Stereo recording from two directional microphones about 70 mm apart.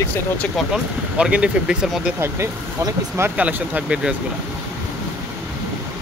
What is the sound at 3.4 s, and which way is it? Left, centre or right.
Speech, right.